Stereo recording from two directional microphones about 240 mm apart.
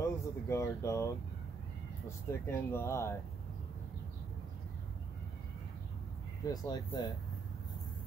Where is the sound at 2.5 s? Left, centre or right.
Centre.